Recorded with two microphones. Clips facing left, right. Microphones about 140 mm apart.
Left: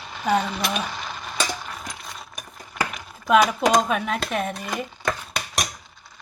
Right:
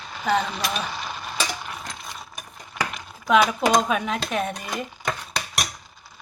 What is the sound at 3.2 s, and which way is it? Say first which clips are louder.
Speech: left 1 dB; centre (ahead or behind).